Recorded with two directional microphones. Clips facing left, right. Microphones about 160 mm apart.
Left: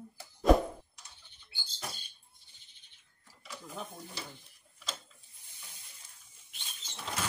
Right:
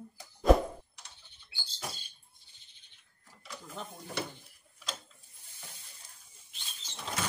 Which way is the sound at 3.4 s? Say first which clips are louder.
Even; 5° left (ahead or behind).